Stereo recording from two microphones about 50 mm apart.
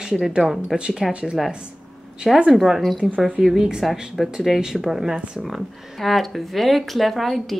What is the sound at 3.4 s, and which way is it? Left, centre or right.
Speech, centre.